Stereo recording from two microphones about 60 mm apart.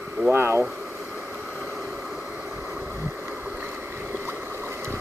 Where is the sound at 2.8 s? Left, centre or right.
Right.